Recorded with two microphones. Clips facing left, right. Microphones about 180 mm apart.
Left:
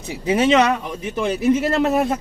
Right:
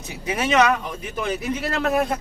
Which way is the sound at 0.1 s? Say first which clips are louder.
Left 6 dB; 30° left (ahead or behind).